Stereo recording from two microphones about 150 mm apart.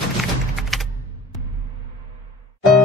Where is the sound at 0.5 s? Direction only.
Centre (ahead or behind).